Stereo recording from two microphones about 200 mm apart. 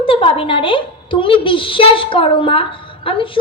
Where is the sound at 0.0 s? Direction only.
25° left (ahead or behind).